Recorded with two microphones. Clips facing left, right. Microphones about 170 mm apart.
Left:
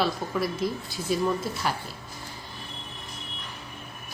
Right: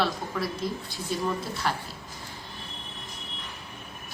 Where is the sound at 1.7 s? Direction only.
10° left (ahead or behind).